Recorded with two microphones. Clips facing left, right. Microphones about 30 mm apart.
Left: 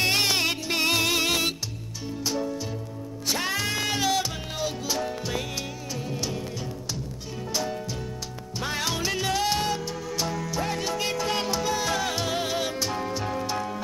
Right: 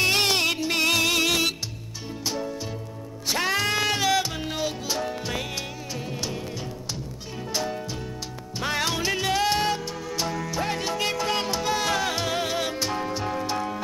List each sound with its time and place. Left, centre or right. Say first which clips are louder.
0.0 s music: right 2 dB; centre
3.3 s music: right 5 dB; right
3.9 s music: right 2 dB; centre
8.8 s music: even; centre
9.8 s music: even; centre